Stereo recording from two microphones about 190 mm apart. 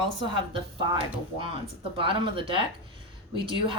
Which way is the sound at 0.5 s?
25° right (ahead or behind).